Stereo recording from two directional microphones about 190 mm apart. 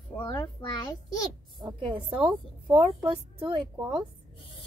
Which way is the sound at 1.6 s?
25° right (ahead or behind).